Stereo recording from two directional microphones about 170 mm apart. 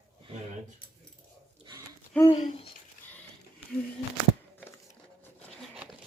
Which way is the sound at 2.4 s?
40° left (ahead or behind).